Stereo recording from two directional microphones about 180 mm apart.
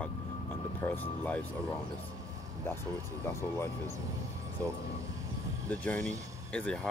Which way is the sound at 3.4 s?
15° left (ahead or behind).